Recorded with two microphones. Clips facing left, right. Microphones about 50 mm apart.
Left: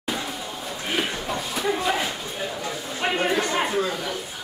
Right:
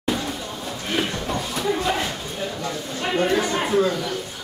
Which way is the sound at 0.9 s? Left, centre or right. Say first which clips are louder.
Right 2 dB; centre.